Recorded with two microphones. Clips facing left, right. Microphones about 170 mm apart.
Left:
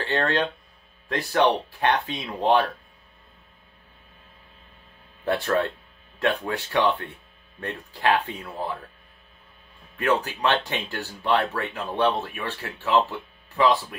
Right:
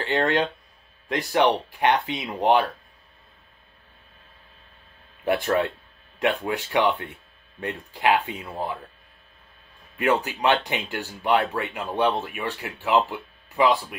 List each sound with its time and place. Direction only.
0.0 s speech: 15° right (ahead or behind)
5.2 s speech: 15° right (ahead or behind)
9.9 s speech: 15° right (ahead or behind)